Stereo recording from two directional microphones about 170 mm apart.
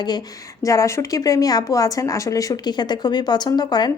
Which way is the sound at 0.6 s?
20° left (ahead or behind).